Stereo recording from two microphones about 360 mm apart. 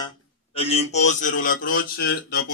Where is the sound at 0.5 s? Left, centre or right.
Centre.